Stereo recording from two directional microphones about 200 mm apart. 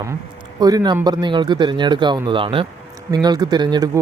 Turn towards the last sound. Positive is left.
turn(degrees=-20)  # may be behind; listen again after turning